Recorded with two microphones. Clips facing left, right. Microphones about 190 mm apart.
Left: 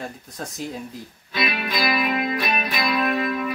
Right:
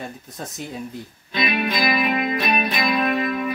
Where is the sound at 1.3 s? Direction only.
20° right (ahead or behind).